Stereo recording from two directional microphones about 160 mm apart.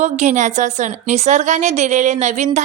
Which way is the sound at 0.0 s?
50° right (ahead or behind).